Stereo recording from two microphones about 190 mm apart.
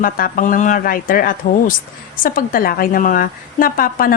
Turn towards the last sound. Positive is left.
turn(degrees=50)  # may be behind; listen again after turning